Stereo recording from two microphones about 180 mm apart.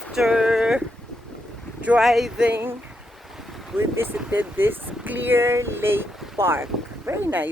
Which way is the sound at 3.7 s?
10° right (ahead or behind).